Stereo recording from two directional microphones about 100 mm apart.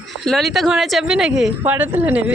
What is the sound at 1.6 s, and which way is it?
Speech, 20° right (ahead or behind).